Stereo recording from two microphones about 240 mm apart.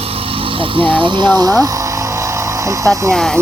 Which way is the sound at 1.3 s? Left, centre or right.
Centre.